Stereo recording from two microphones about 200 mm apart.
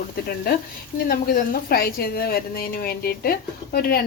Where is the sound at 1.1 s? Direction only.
50° left (ahead or behind).